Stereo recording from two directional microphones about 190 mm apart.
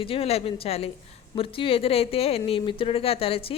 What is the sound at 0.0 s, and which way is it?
A woman's voice, 30° left (ahead or behind).